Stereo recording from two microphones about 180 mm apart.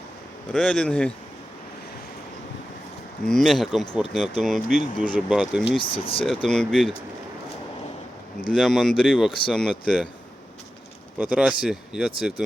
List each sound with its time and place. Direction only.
0.5 s speech: 5° left (ahead or behind)
3.2 s speech: centre (ahead or behind)
5.6 s speech: 30° left (ahead or behind)
6.2 s speech: centre (ahead or behind)
8.5 s speech: centre (ahead or behind)
11.2 s speech: 5° right (ahead or behind)